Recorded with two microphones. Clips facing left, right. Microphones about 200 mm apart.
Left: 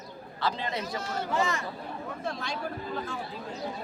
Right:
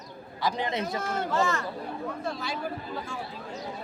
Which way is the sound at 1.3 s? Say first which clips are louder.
Right 1 dB; 15° left (ahead or behind).